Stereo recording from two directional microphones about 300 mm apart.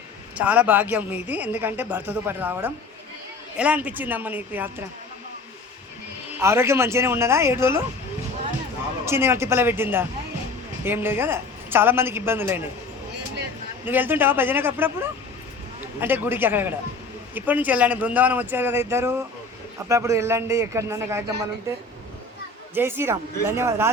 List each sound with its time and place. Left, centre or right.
0.3 s speech: centre
6.4 s a woman's voice: centre
9.0 s a woman's voice: centre
13.8 s a woman's voice: centre
16.0 s a woman's voice: centre
22.7 s a woman's voice: centre